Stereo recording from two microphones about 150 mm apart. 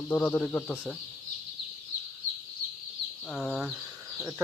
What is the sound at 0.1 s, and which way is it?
Speech, 10° left (ahead or behind).